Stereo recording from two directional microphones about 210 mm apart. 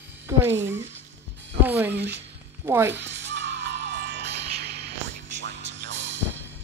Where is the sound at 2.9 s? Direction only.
60° right (ahead or behind).